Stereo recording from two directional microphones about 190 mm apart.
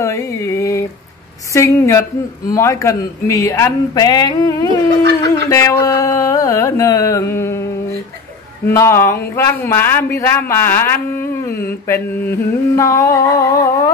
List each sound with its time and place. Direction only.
0.0 s speech: 15° left (ahead or behind)
8.6 s speech: 15° left (ahead or behind)